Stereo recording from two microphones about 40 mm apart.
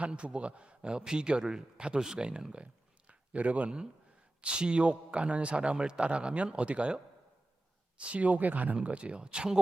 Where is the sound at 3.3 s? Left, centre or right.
Right.